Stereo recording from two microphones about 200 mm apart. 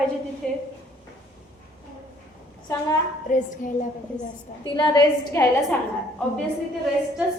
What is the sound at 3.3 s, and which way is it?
Music, 45° left (ahead or behind).